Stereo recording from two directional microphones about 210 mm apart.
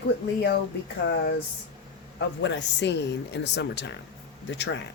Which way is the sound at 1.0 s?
55° left (ahead or behind).